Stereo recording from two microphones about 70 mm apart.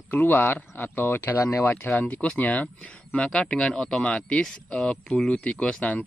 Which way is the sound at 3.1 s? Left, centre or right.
Centre.